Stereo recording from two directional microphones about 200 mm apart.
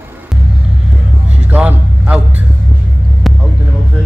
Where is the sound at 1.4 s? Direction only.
10° right (ahead or behind).